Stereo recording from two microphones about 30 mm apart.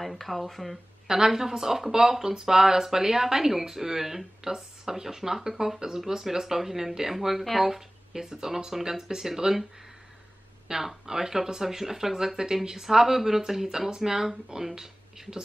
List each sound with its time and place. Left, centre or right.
0.0 s speech: centre
1.0 s speech: centre
10.7 s speech: right